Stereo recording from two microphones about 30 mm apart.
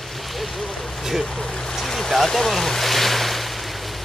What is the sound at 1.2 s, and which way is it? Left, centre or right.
Speech, centre.